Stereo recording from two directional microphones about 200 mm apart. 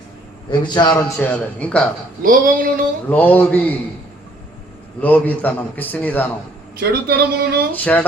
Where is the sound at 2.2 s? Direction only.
40° right (ahead or behind).